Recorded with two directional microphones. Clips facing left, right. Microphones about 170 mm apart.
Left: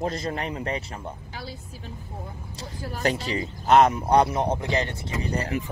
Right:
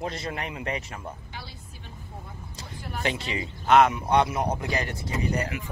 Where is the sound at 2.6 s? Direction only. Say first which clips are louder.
Left 3 dB; 40° left (ahead or behind).